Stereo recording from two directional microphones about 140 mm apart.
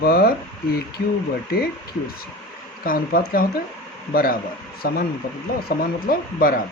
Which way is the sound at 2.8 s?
90° left.